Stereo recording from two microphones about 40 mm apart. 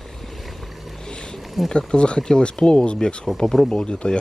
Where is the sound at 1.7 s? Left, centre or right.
Left.